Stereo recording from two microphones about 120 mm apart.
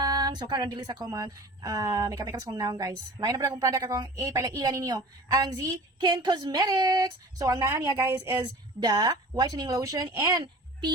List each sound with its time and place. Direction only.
0.0 s speech: 35° right (ahead or behind)
8.8 s a child's voice: 35° right (ahead or behind)